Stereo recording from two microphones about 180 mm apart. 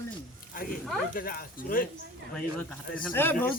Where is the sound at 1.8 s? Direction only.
50° left (ahead or behind).